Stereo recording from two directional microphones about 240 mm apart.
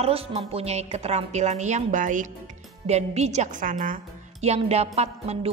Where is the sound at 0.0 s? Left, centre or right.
Right.